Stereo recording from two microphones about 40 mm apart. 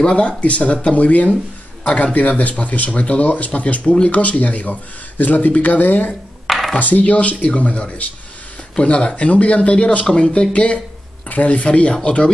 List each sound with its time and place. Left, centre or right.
0.0 s speech: left
6.4 s a sound: centre
6.8 s speech: left